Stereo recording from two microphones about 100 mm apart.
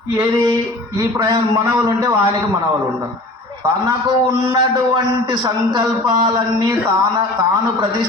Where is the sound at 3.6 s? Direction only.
40° right (ahead or behind).